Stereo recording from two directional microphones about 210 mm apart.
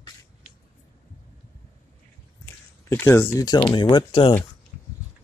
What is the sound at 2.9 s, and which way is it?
Speech, 10° left (ahead or behind).